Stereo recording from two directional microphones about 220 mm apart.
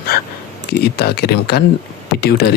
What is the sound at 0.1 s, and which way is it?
Speech, 45° left (ahead or behind).